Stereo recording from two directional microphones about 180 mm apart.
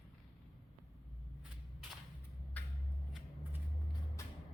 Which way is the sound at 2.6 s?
10° left (ahead or behind).